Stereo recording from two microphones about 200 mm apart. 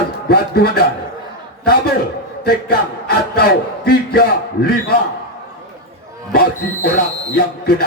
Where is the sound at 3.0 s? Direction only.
50° left (ahead or behind).